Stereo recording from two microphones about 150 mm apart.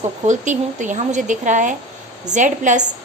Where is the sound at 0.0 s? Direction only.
55° right (ahead or behind).